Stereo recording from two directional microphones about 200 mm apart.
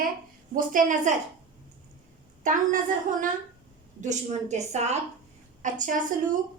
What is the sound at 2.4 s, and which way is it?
A woman's voice, 40° right (ahead or behind).